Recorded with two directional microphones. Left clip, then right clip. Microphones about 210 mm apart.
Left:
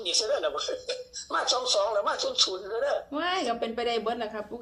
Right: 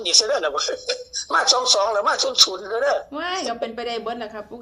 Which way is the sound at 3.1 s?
5° right (ahead or behind).